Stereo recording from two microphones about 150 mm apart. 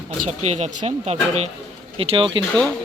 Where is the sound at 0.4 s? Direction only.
45° right (ahead or behind).